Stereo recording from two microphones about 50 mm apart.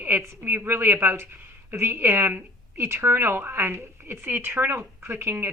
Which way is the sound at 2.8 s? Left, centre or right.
Right.